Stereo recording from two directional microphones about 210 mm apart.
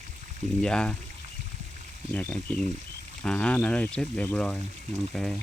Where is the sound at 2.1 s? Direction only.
5° left (ahead or behind).